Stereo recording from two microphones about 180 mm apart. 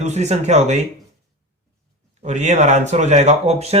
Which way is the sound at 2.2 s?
40° right (ahead or behind).